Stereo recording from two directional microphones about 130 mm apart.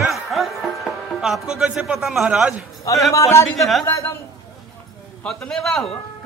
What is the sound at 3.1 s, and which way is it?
Speech, 20° left (ahead or behind).